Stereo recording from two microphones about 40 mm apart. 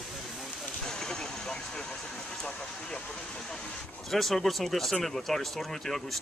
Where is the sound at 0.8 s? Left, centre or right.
Centre.